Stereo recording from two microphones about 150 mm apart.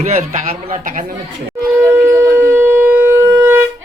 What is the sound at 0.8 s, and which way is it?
Speech, 65° right (ahead or behind).